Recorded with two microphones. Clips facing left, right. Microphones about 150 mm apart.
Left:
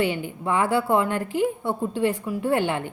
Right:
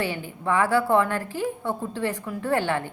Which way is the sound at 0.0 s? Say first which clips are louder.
Left 3 dB; 20° left (ahead or behind).